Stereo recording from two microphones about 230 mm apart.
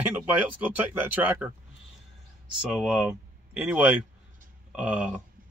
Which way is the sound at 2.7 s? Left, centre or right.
Centre.